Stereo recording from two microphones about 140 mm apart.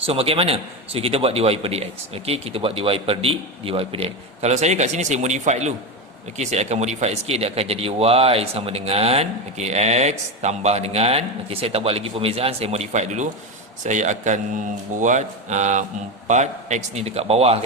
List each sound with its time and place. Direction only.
0.0 s a man's voice: 45° right (ahead or behind)